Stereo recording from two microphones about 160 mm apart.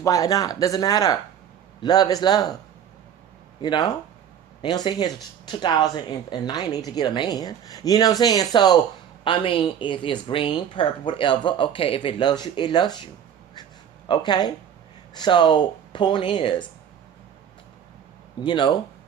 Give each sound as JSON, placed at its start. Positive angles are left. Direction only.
{"t": 0.0, "sound": "speech", "side_deg": 20}
{"t": 3.6, "sound": "a woman's voice", "side_deg": 25}
{"t": 14.1, "sound": "speech", "side_deg": 25}
{"t": 18.3, "sound": "speech", "side_deg": 30}